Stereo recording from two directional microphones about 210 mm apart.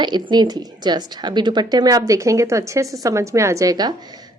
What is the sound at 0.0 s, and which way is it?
A woman's voice, 20° right (ahead or behind).